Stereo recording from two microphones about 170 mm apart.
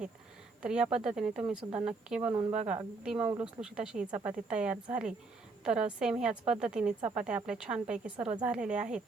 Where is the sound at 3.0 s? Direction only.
5° right (ahead or behind).